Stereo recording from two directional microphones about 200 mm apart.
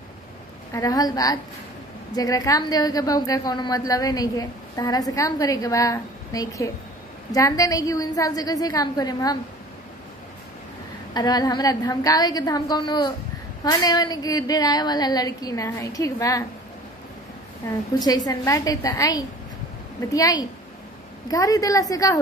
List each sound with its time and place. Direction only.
0.7 s a woman's voice: 20° left (ahead or behind)
11.1 s a woman's voice: 20° left (ahead or behind)
18.0 s a woman's voice: 20° left (ahead or behind)